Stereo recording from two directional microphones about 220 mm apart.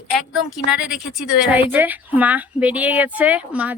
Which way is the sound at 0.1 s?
Centre (ahead or behind).